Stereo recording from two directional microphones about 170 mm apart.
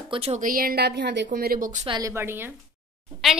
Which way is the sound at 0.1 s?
35° right (ahead or behind).